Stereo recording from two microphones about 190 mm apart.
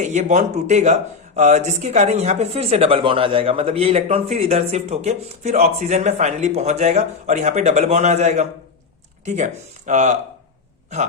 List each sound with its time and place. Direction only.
0.0 s speech: 40° right (ahead or behind)